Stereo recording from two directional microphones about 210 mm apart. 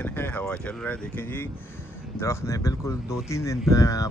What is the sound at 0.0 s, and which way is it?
Speech, 10° left (ahead or behind).